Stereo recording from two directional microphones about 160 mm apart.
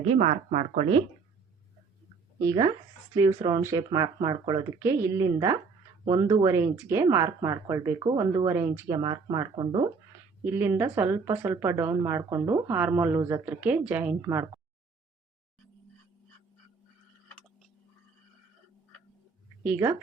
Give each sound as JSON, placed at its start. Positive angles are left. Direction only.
{"t": 0.1, "sound": "speech", "side_deg": -45}
{"t": 2.4, "sound": "speech", "side_deg": -25}
{"t": 9.0, "sound": "speech", "side_deg": -30}
{"t": 10.4, "sound": "speech", "side_deg": -15}
{"t": 19.6, "sound": "speech", "side_deg": -15}